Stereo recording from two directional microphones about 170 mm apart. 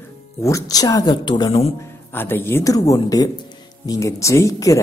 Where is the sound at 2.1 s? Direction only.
15° left (ahead or behind).